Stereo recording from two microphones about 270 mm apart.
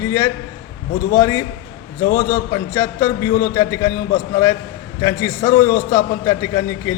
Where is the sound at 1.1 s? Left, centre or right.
Centre.